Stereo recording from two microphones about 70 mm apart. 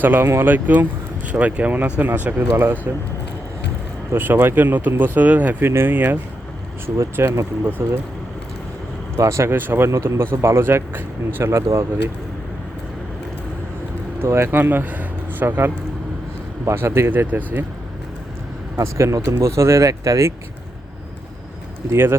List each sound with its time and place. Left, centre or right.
0.0 s speech: right
4.1 s speech: right
6.9 s speech: right
9.1 s speech: right
9.6 s speech: right
14.2 s speech: right
15.4 s speech: right
18.8 s speech: right